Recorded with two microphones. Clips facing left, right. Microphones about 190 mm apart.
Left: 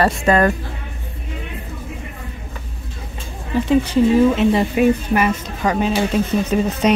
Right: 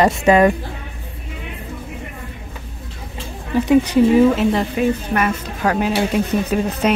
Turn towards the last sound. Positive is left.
turn(degrees=-5)  # may be behind; listen again after turning